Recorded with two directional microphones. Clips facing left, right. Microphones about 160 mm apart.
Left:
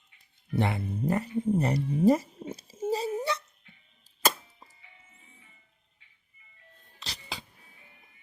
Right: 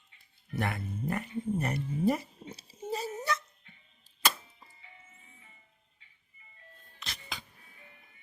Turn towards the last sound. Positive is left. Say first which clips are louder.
# left 2 dB
turn(degrees=30)  # may be behind; listen again after turning